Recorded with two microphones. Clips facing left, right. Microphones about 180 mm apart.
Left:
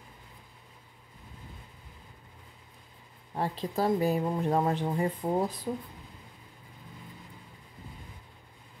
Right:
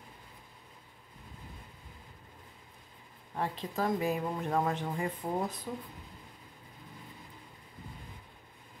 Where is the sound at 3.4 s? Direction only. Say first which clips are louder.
Left 4 dB; 35° left (ahead or behind).